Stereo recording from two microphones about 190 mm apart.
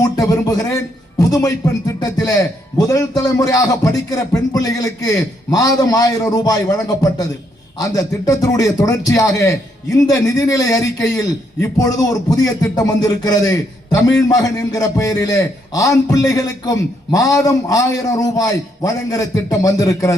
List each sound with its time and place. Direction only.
0.0 s a man's voice: 20° left (ahead or behind)